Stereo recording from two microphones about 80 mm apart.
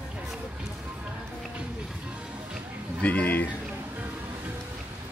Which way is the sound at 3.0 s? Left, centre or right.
Centre.